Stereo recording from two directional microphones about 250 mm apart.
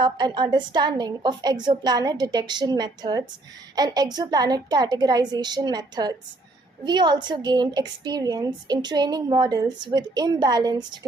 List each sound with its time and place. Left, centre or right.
0.0 s a woman's voice: centre